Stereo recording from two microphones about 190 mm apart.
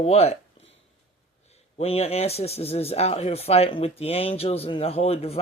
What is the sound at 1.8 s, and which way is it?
Speech, 30° left (ahead or behind).